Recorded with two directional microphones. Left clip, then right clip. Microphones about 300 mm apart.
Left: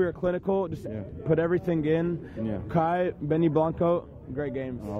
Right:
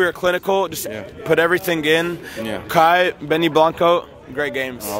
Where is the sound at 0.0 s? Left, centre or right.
Centre.